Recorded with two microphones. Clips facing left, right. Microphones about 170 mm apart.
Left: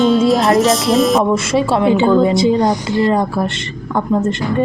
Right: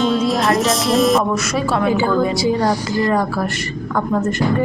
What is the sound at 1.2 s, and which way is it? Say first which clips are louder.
A woman's voice: left 5 dB; 25° left (ahead or behind).